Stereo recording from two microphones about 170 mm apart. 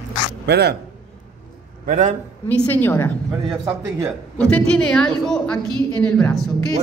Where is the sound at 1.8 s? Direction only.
50° right (ahead or behind).